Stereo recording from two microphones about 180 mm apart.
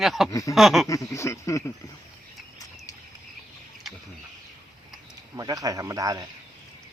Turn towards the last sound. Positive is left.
turn(degrees=-20)  # may be behind; listen again after turning